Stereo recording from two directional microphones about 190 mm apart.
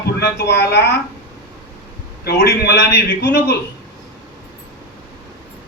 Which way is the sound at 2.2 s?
60° left (ahead or behind).